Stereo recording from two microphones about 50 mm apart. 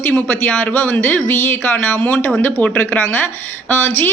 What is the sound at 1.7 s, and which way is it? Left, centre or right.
Speech, left.